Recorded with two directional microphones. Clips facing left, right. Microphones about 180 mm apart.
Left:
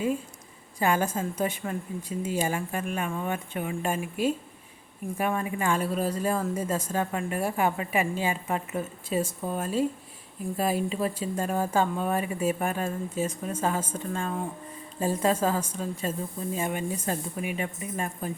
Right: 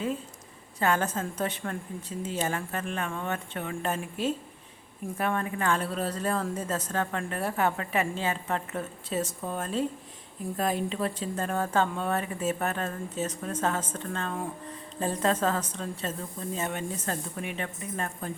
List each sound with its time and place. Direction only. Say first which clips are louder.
0.8 s speech: left 1 dB; 10° left (ahead or behind)